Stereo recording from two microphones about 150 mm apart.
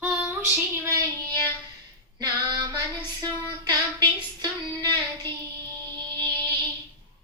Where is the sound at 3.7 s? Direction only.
30° right (ahead or behind).